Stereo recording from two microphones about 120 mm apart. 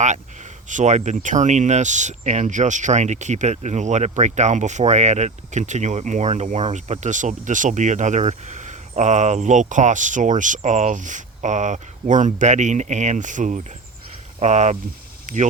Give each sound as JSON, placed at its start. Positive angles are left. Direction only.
{"t": 0.7, "sound": "speech", "side_deg": -85}
{"t": 14.3, "sound": "speech", "side_deg": -70}
{"t": 15.3, "sound": "speech", "side_deg": -90}